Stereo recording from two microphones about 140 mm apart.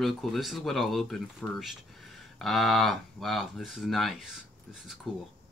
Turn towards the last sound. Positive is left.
turn(degrees=0)  # may be behind; listen again after turning